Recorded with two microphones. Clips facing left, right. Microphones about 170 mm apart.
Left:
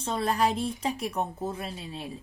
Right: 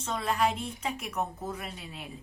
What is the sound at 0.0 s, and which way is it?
Speech, 35° left (ahead or behind).